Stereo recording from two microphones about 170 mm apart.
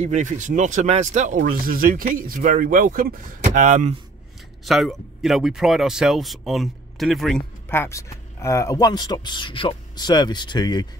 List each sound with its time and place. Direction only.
0.0 s speech: 45° right (ahead or behind)
4.6 s speech: centre (ahead or behind)
7.6 s speech: 15° left (ahead or behind)